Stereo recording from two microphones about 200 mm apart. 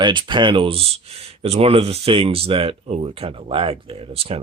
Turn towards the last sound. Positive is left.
turn(degrees=-30)  # may be behind; listen again after turning